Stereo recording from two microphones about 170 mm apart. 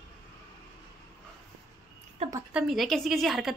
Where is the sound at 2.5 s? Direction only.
Centre (ahead or behind).